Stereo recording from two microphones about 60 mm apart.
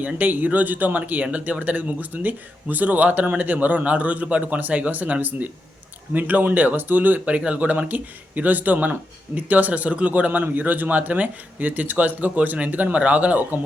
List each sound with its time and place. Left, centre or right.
0.0 s speech: right